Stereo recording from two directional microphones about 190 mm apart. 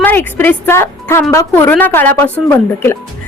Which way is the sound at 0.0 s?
10° left (ahead or behind).